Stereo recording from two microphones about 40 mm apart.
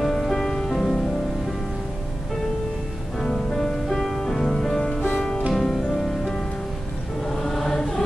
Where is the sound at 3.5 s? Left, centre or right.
Centre.